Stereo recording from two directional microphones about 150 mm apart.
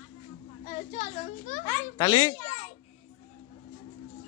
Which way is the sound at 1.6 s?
25° left (ahead or behind).